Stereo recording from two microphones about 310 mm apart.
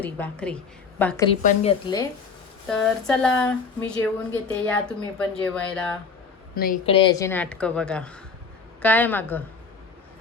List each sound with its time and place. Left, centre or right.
0.0 s a woman's voice: centre
2.6 s speech: centre
6.5 s a woman's voice: left; by 9.4 s centre